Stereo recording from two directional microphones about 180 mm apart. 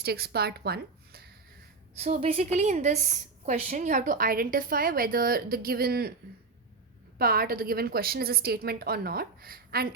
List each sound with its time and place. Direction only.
0.0 s a woman's voice: 60° right (ahead or behind)
2.0 s a woman's voice: 35° right (ahead or behind); by 6.1 s 60° right (ahead or behind)
7.2 s a woman's voice: 55° right (ahead or behind)